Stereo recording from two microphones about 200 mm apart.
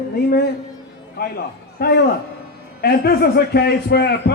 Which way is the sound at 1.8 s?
50° left (ahead or behind).